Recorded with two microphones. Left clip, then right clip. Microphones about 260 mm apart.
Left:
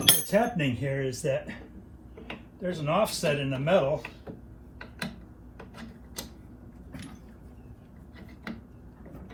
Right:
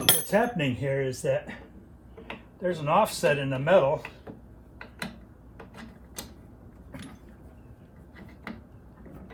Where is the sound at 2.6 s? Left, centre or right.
Centre.